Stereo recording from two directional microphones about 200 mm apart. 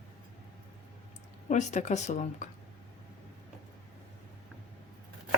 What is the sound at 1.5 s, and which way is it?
Speech, 35° left (ahead or behind).